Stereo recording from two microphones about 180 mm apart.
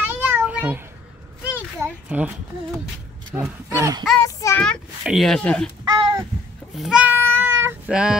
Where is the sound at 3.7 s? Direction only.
15° right (ahead or behind).